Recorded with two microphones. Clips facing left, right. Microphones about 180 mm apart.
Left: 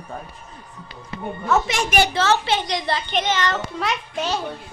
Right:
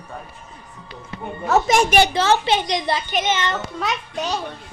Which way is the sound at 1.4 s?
40° right (ahead or behind).